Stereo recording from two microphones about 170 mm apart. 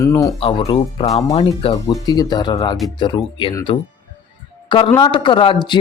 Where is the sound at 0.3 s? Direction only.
35° left (ahead or behind).